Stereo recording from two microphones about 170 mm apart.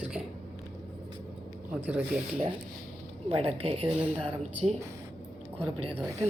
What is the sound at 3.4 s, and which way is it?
Speech, 40° right (ahead or behind).